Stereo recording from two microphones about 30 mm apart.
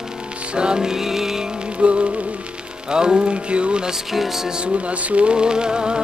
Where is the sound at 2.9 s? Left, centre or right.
Right.